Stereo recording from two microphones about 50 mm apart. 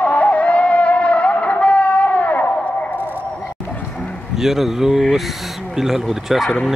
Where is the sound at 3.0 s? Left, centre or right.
Right.